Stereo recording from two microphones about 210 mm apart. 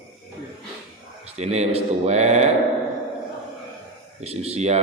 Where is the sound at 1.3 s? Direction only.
30° right (ahead or behind).